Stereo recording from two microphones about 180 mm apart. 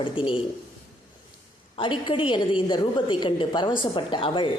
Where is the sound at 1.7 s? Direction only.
30° left (ahead or behind).